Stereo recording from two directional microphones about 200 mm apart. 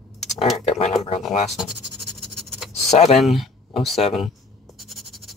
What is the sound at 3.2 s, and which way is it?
Speech, centre (ahead or behind).